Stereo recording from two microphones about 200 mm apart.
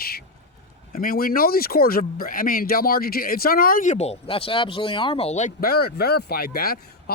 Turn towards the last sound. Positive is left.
turn(degrees=50)  # may be behind; listen again after turning